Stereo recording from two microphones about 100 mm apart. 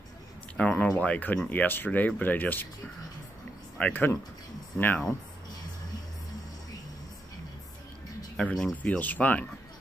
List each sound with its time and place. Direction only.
0.6 s speech: 10° left (ahead or behind)
3.7 s speech: 15° left (ahead or behind)
8.4 s speech: 5° left (ahead or behind)